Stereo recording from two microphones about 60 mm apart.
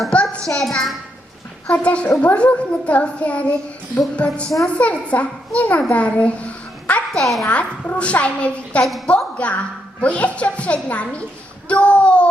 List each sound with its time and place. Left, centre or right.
0.1 s child singing: centre
0.6 s a child's voice: centre
1.6 s a child's voice: centre
7.1 s a child's voice: centre
7.4 s a child's voice: left
8.8 s a child's voice: centre
9.0 s a child's voice: centre